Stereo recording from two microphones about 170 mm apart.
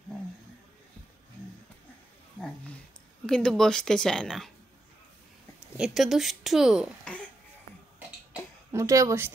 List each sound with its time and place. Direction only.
3.3 s speech: 5° left (ahead or behind)
5.8 s speech: centre (ahead or behind)
8.3 s a sound: 15° right (ahead or behind)